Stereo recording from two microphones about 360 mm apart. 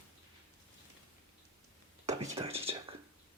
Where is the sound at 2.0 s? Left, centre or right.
Centre.